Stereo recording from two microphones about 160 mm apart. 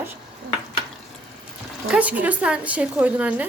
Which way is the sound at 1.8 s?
10° right (ahead or behind).